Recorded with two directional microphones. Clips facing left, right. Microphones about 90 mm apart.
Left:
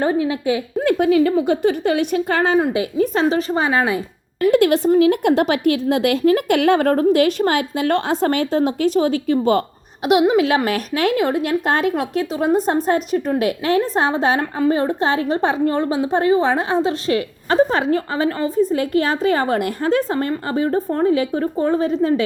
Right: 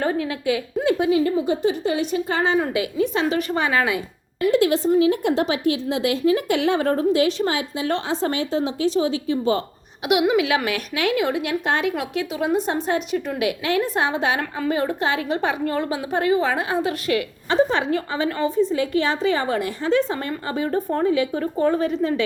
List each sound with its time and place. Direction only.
0.0 s a woman's voice: 25° left (ahead or behind)
0.9 s a woman's voice: 55° left (ahead or behind)
3.0 s a woman's voice: 35° left (ahead or behind)
4.4 s a woman's voice: 60° left (ahead or behind)
10.1 s a woman's voice: 35° left (ahead or behind)